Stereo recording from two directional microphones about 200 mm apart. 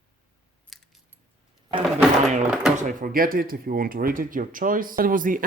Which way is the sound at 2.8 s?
45° right (ahead or behind).